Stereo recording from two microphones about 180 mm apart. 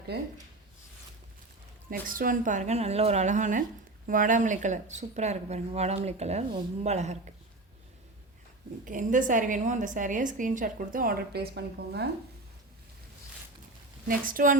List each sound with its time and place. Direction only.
1.9 s a woman's voice: 50° right (ahead or behind)
8.8 s a woman's voice: 45° right (ahead or behind); by 12.0 s 65° right (ahead or behind)
14.1 s a woman's voice: 50° right (ahead or behind)